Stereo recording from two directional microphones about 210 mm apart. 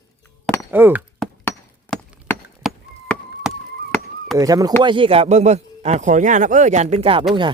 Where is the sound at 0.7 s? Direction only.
10° right (ahead or behind).